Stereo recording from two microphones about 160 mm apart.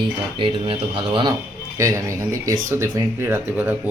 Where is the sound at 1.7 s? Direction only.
20° right (ahead or behind).